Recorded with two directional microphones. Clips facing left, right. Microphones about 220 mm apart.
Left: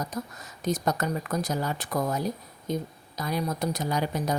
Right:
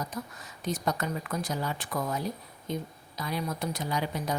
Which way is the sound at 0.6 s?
40° left (ahead or behind).